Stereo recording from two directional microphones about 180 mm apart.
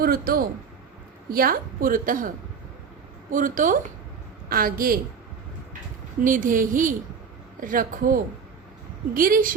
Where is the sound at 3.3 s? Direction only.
45° right (ahead or behind).